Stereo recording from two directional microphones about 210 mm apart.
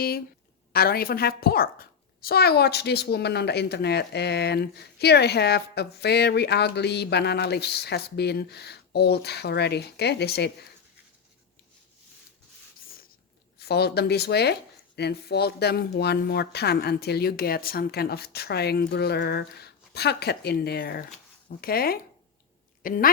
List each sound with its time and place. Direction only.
0.7 s a child's voice: 45° left (ahead or behind)
13.6 s a child's voice: 50° left (ahead or behind)